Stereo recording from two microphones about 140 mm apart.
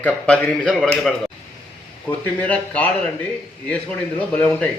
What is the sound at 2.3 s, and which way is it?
Speech, 10° left (ahead or behind).